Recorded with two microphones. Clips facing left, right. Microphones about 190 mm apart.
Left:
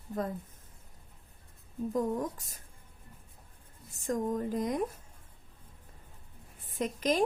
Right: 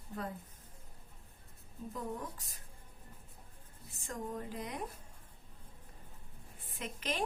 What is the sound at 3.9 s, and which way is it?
Speech, 40° left (ahead or behind).